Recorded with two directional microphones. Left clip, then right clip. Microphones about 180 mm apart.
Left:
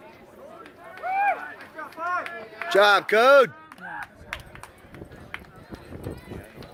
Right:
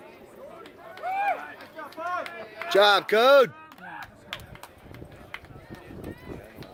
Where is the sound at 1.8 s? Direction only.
55° right (ahead or behind).